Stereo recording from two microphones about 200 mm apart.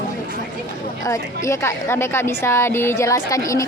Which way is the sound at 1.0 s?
15° left (ahead or behind).